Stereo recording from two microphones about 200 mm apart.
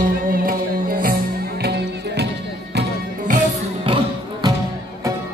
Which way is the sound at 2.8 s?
45° right (ahead or behind).